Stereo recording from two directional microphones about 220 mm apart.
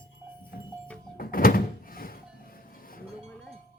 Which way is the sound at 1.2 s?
40° left (ahead or behind).